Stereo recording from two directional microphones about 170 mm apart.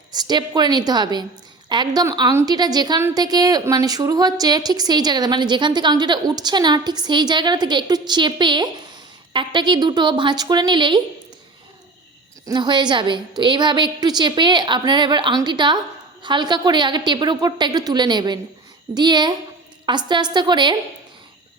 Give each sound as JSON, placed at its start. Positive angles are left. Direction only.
{"t": 0.1, "sound": "a woman's voice", "side_deg": -25}
{"t": 12.5, "sound": "a woman's voice", "side_deg": -25}